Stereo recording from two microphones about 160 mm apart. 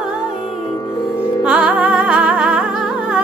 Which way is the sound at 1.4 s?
5° right (ahead or behind).